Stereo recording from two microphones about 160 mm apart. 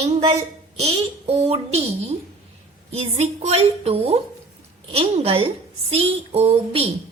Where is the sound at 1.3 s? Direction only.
40° right (ahead or behind).